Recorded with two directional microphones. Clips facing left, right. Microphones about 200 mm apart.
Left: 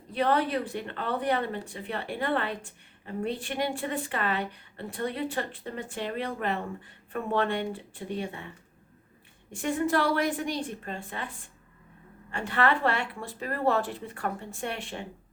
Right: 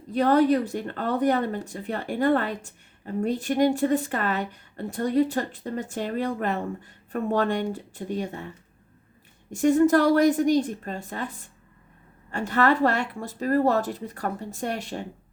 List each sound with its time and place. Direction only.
0.1 s a woman's voice: 40° right (ahead or behind)
9.5 s speech: 40° right (ahead or behind)